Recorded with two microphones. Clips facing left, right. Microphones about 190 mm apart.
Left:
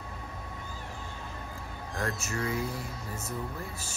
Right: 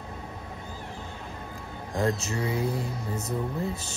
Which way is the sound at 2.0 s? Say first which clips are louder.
Right 6 dB; 20° right (ahead or behind).